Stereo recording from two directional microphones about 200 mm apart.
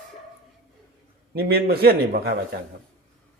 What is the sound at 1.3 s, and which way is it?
A man's voice, 50° right (ahead or behind).